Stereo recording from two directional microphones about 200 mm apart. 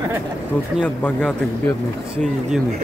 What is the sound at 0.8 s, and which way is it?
Speech, 5° left (ahead or behind).